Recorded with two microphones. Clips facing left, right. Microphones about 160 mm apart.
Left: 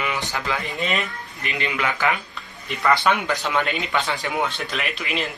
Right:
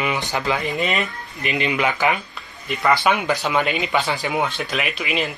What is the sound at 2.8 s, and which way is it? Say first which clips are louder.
Speech: right 1 dB; 5° right (ahead or behind).